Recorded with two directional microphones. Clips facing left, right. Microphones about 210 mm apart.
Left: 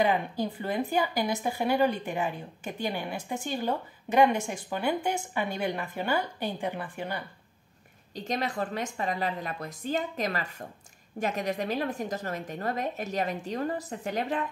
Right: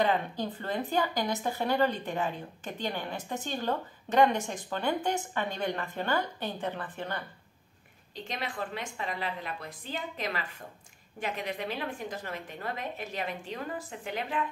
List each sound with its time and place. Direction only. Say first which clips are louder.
0.0 s speech: left 2 dB; 10° left (ahead or behind)
8.1 s a woman's voice: left 6 dB; 40° left (ahead or behind)